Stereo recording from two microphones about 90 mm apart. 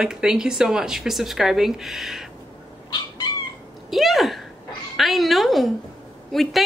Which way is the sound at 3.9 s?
Centre (ahead or behind).